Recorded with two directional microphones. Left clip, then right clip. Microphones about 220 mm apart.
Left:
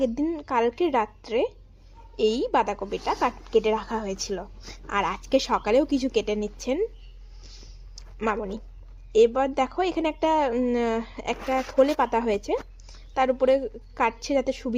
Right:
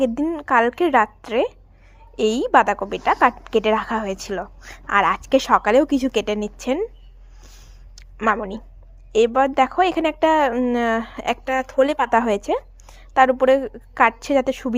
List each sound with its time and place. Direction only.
0.1 s a woman's voice: 15° right (ahead or behind)
8.2 s a woman's voice: 25° right (ahead or behind)
13.0 s a sound: 20° right (ahead or behind)
13.4 s a woman's voice: 20° right (ahead or behind)